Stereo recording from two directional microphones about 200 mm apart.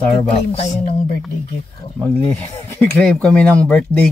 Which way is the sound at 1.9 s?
5° left (ahead or behind).